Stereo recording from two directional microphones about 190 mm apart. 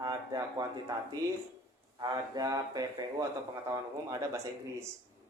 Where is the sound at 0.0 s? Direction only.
20° right (ahead or behind).